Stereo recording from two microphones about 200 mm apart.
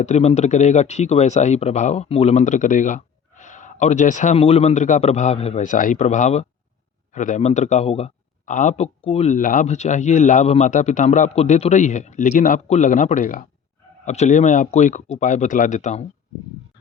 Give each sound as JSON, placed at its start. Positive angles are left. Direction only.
{"t": 0.0, "sound": "speech", "side_deg": 35}